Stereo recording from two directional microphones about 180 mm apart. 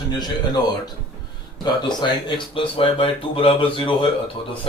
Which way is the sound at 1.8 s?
25° left (ahead or behind).